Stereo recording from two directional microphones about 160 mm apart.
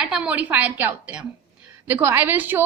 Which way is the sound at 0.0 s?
5° right (ahead or behind).